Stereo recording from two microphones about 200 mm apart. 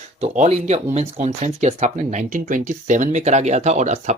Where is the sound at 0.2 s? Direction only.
35° right (ahead or behind).